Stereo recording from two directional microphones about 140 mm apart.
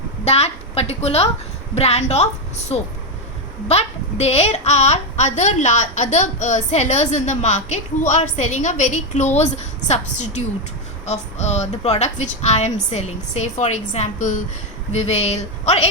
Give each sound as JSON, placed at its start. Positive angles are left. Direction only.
{"t": 0.3, "sound": "a woman's voice", "side_deg": 50}
{"t": 4.2, "sound": "a woman's voice", "side_deg": 50}
{"t": 14.9, "sound": "speech", "side_deg": 50}